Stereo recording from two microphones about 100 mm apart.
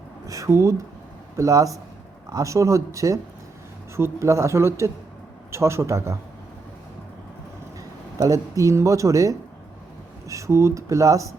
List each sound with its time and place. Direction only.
0.3 s speech: 30° right (ahead or behind)
8.2 s speech: 35° right (ahead or behind)